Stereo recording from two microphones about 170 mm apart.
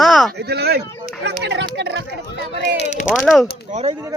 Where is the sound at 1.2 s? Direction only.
85° right.